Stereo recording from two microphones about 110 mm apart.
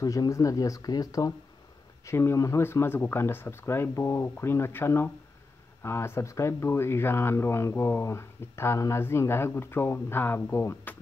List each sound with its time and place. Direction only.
0.0 s speech: 30° left (ahead or behind)
2.0 s speech: 25° left (ahead or behind)